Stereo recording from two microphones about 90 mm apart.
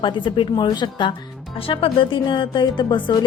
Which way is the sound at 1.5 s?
80° left.